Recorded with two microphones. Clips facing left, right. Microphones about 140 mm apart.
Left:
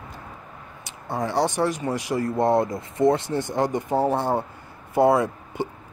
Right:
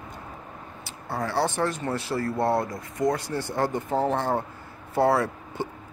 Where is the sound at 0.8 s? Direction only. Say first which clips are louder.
Left 3 dB; 20° left (ahead or behind).